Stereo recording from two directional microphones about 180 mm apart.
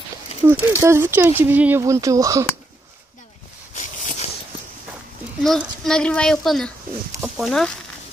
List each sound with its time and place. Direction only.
0.5 s speech: 15° right (ahead or behind)
3.7 s a sound: 45° left (ahead or behind)
5.4 s speech: centre (ahead or behind)